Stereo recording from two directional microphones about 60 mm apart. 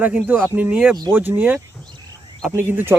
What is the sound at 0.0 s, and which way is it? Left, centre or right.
Speech, right.